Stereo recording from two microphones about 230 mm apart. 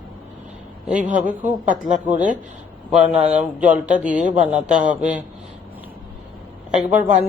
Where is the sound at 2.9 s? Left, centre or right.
Right.